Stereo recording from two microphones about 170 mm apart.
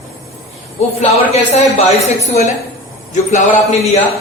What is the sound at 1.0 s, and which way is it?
Speech, 40° left (ahead or behind).